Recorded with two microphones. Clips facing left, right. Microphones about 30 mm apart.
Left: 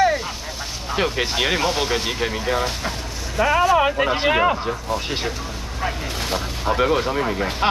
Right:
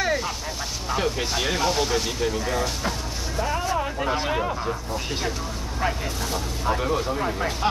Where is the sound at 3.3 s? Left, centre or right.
Left.